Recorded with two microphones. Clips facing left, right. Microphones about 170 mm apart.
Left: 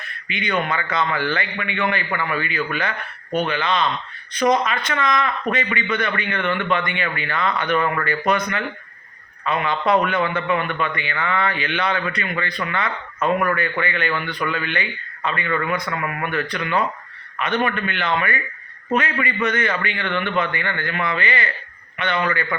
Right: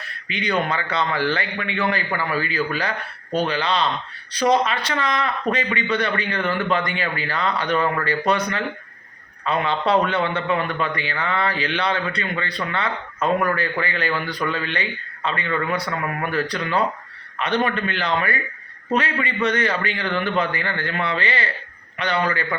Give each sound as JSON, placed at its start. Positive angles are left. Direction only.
{"t": 0.0, "sound": "speech", "side_deg": -35}